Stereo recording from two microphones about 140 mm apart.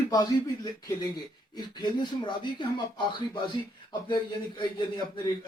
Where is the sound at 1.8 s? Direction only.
35° left (ahead or behind).